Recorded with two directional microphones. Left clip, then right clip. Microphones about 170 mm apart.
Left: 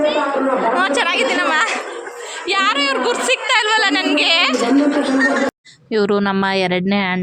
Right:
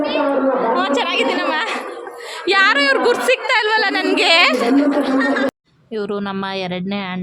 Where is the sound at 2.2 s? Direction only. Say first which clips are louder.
Right 3 dB; 50° right (ahead or behind); by 3.9 s 35° right (ahead or behind).